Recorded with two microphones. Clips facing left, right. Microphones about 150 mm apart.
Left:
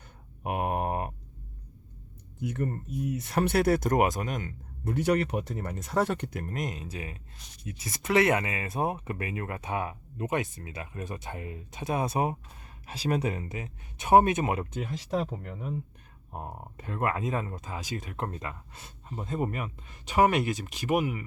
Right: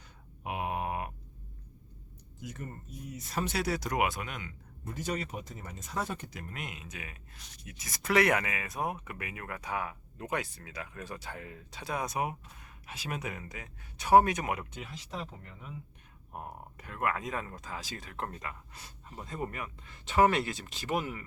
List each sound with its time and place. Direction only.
0.4 s a sound: 55° left (ahead or behind)
2.4 s speech: 60° left (ahead or behind); by 4.5 s 45° left (ahead or behind)
4.9 s speech: 65° left (ahead or behind)
6.4 s speech: 40° left (ahead or behind)
14.6 s speech: 45° left (ahead or behind)
16.3 s speech: 25° left (ahead or behind)